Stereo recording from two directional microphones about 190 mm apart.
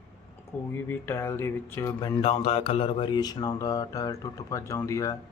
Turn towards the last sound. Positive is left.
turn(degrees=15)  # may be behind; listen again after turning